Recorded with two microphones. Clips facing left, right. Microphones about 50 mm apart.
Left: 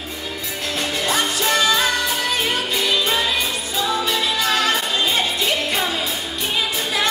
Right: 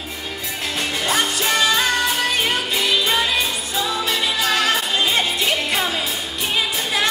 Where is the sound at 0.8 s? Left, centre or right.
Centre.